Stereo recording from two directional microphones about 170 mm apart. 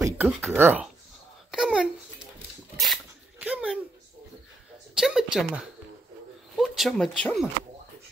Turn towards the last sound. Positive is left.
turn(degrees=5)  # may be behind; listen again after turning